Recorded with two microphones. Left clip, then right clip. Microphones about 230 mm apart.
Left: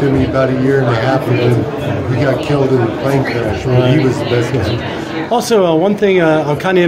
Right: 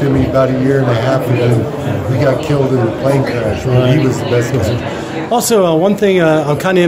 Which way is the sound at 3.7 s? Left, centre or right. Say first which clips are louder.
Left 1 dB; centre.